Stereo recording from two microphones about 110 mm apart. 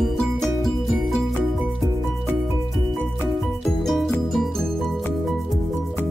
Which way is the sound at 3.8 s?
Centre (ahead or behind).